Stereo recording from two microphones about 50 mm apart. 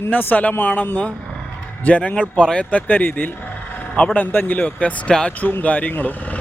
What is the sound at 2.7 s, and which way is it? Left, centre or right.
A man's voice, left.